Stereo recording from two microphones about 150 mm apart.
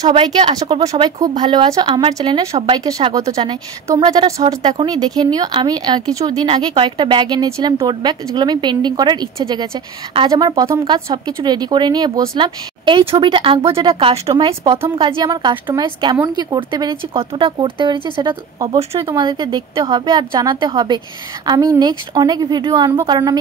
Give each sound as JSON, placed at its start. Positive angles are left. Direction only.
{"t": 0.1, "sound": "a woman's voice", "side_deg": -30}
{"t": 4.0, "sound": "a woman's voice", "side_deg": -30}